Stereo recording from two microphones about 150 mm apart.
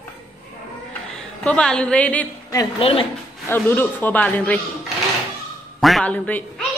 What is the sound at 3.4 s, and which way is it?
A man's voice, 15° left (ahead or behind).